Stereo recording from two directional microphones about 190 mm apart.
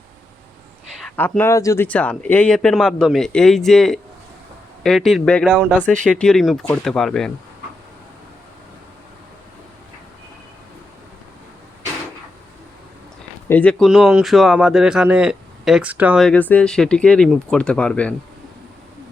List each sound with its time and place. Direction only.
1.1 s a man's voice: 10° left (ahead or behind)
13.5 s a man's voice: 5° left (ahead or behind)
16.2 s a man's voice: 10° left (ahead or behind)